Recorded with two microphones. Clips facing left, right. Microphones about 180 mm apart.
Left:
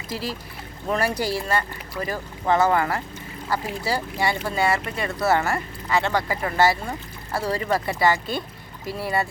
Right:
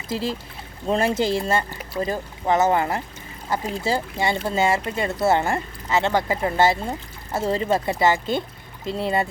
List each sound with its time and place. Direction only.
0.1 s speech: 25° right (ahead or behind)